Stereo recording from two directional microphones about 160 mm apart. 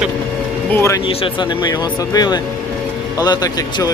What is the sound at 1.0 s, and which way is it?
Speech, 30° left (ahead or behind).